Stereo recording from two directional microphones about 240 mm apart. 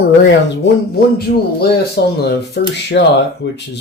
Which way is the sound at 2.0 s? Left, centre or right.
Left.